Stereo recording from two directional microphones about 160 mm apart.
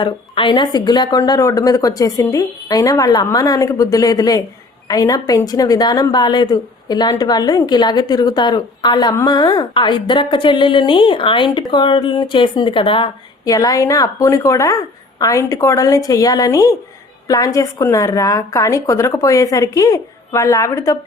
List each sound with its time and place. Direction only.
0.0 s a woman's voice: 30° left (ahead or behind)
13.4 s a woman's voice: 25° left (ahead or behind)